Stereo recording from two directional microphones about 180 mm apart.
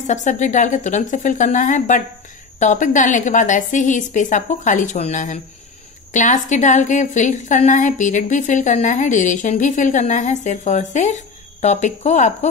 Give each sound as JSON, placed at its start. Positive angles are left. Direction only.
{"t": 0.0, "sound": "a woman's voice", "side_deg": 40}